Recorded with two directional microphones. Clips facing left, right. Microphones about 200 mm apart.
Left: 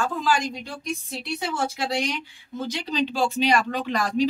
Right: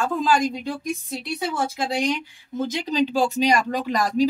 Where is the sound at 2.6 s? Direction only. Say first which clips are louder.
Right 4 dB; 45° right (ahead or behind).